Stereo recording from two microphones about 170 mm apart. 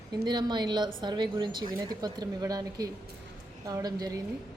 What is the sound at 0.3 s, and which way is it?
Speech, 25° right (ahead or behind).